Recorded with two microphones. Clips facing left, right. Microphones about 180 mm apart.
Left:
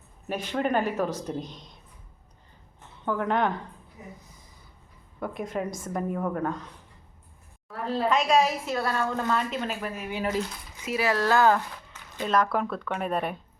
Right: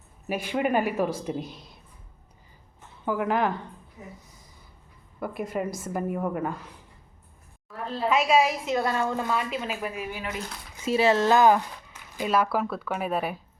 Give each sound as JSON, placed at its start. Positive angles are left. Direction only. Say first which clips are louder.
{"t": 0.3, "sound": "speech", "louder": "right 1 dB", "side_deg": -10}
{"t": 3.0, "sound": "a woman's voice", "louder": "right 1 dB", "side_deg": -5}
{"t": 5.2, "sound": "a woman's voice", "louder": "right 1 dB", "side_deg": -5}
{"t": 8.1, "sound": "speech", "louder": "right 2 dB", "side_deg": -5}
{"t": 9.0, "sound": "a woman's voice", "louder": "even", "side_deg": -5}
{"t": 10.2, "sound": "speech", "louder": "left 6 dB", "side_deg": 35}
{"t": 10.8, "sound": "a woman's voice", "louder": "right 4 dB", "side_deg": -25}